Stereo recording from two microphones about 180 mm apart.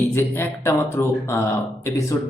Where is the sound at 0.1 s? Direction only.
10° left (ahead or behind).